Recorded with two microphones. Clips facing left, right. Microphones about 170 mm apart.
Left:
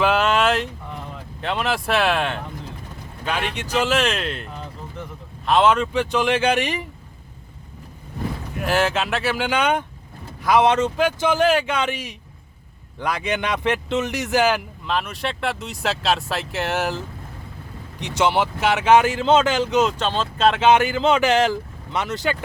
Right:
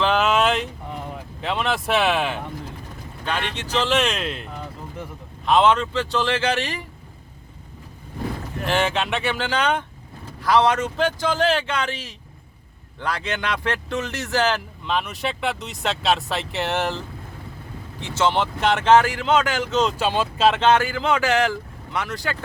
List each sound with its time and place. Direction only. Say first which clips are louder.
0.0 s a sound: left 1 dB; centre (ahead or behind)
1.4 s speech: left 1 dB; centre (ahead or behind)
5.5 s speech: even; centre (ahead or behind); by 6.8 s 15° left (ahead or behind)
8.5 s speech: left 2 dB; 5° left (ahead or behind); by 10.9 s 25° left (ahead or behind)
11.2 s speech: left 5 dB; 15° left (ahead or behind)
14.8 s speech: even; centre (ahead or behind)
18.0 s speech: left 1 dB; 15° left (ahead or behind)
19.7 s speech: even; 5° left (ahead or behind)
20.0 s speech: right 1 dB; 10° right (ahead or behind)
20.5 s speech: left 3 dB; 10° left (ahead or behind)
20.7 s speech: left 3 dB; 20° left (ahead or behind)